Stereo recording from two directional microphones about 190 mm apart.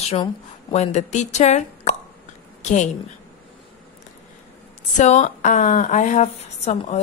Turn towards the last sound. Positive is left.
turn(degrees=35)  # may be behind; listen again after turning